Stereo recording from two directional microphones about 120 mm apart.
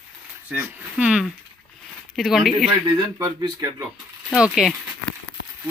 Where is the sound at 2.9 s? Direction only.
35° right (ahead or behind).